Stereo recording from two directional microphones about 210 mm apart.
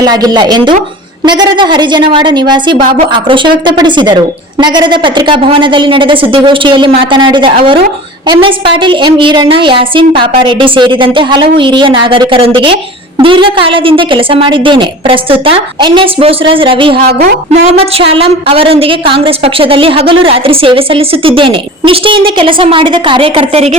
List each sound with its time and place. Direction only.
0.0 s a woman's voice: 20° right (ahead or behind)
17.1 s a woman's voice: 50° right (ahead or behind)
17.7 s a woman's voice: 25° right (ahead or behind)